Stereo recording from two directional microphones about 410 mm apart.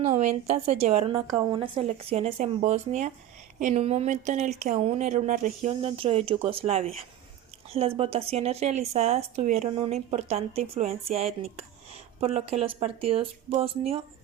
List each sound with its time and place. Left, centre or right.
0.0 s speech: centre